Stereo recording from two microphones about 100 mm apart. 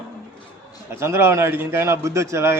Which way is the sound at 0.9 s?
25° right (ahead or behind).